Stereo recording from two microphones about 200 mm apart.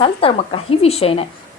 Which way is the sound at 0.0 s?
25° left (ahead or behind).